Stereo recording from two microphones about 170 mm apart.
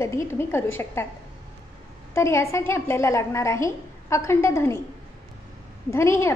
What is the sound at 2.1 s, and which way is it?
A woman's voice, 15° left (ahead or behind).